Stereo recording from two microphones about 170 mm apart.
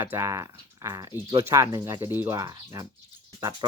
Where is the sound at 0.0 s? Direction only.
15° right (ahead or behind).